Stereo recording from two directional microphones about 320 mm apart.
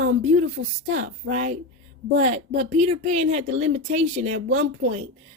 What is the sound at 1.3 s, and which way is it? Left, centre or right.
Speech, right.